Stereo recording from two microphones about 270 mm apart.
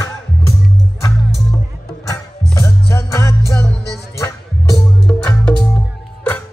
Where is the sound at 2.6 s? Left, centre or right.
Centre.